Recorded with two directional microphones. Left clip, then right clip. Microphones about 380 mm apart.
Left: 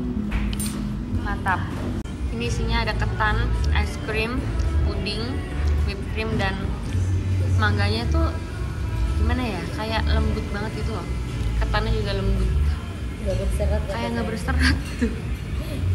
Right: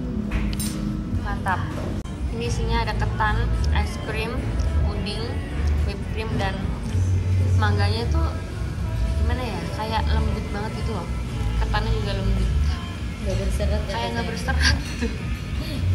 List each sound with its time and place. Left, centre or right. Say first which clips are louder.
2.4 s a woman's voice: even; centre
7.6 s a woman's voice: left 1 dB; centre
9.3 s a woman's voice: left 2 dB; centre
11.7 s a woman's voice: left 2 dB; centre
13.9 s a woman's voice: even; centre